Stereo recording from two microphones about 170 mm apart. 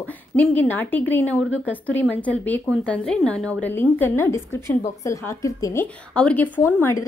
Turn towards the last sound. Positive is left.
turn(degrees=15)  # may be behind; listen again after turning